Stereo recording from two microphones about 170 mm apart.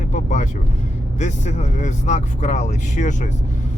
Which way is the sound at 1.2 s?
45° left (ahead or behind).